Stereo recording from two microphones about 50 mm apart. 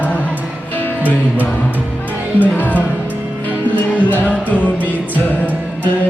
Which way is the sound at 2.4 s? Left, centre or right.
Left.